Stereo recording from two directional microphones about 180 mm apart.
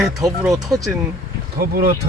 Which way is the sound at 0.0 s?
Centre (ahead or behind).